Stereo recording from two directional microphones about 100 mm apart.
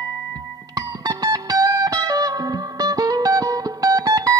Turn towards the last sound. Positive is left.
turn(degrees=-40)  # may be behind; listen again after turning